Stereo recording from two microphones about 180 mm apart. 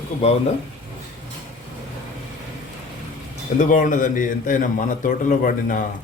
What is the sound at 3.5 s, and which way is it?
A man's voice, 45° left (ahead or behind).